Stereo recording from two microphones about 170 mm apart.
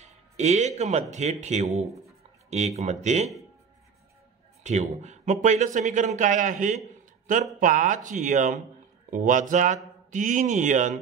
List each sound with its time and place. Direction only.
0.0 s speech: 45° right (ahead or behind)
4.6 s speech: 45° right (ahead or behind)